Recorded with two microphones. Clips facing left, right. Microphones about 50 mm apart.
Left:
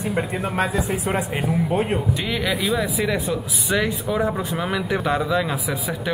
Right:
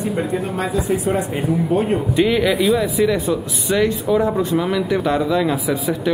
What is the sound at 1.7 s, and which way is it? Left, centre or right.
Speech, left.